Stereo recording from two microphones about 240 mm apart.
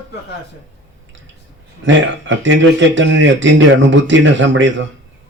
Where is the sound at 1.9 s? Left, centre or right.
Right.